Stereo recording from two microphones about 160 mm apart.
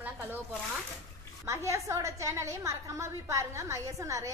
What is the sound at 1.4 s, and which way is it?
A woman's voice, 20° right (ahead or behind).